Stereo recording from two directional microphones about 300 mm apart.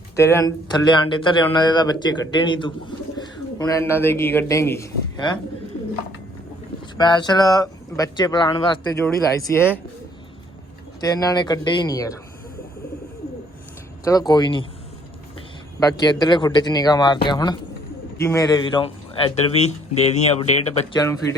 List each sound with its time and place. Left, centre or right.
0.2 s speech: centre
6.9 s speech: centre
11.0 s speech: centre
14.0 s speech: centre
15.8 s speech: centre
21.0 s speech: centre